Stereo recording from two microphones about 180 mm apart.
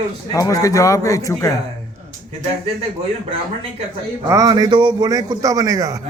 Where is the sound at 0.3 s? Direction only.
20° left (ahead or behind).